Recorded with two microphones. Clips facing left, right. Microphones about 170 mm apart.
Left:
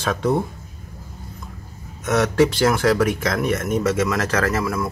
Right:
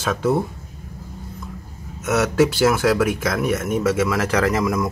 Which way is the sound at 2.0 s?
5° right (ahead or behind).